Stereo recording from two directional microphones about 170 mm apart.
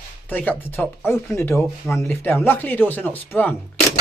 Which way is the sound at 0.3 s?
10° left (ahead or behind).